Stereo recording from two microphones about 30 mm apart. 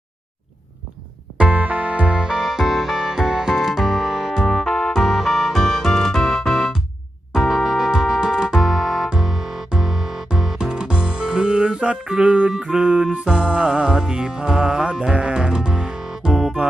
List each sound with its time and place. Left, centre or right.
1.4 s music: right
1.6 s music: right
2.1 s music: right
2.4 s music: centre
4.4 s music: centre
4.9 s music: centre; by 8.6 s right
8.6 s music: centre
10.6 s music: right
12.5 s music: centre
12.8 s music: right
14.8 s speech: right
15.7 s music: right